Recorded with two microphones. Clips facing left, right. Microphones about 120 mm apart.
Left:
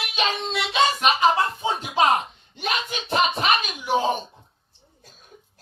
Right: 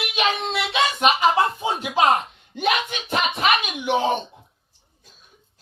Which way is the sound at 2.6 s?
35° left (ahead or behind).